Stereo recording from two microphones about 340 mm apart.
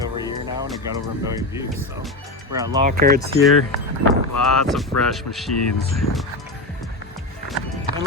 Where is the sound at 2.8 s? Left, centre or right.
Right.